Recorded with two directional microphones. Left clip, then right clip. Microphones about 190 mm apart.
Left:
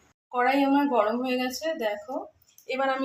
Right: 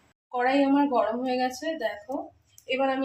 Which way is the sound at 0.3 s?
25° left (ahead or behind).